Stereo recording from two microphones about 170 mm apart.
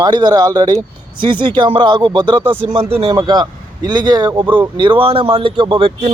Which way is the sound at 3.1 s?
25° right (ahead or behind).